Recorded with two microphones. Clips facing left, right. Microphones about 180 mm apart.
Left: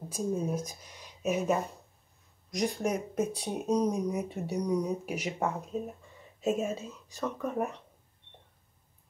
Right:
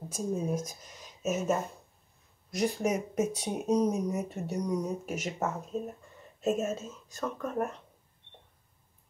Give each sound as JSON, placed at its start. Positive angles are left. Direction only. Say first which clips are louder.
{"t": 0.1, "sound": "speech", "louder": "even", "side_deg": 0}
{"t": 4.6, "sound": "speech", "louder": "left 2 dB", "side_deg": 10}